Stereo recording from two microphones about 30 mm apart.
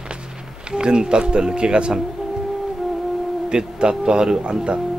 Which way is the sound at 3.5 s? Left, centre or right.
Right.